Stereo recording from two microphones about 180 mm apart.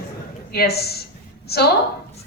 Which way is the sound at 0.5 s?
60° left (ahead or behind).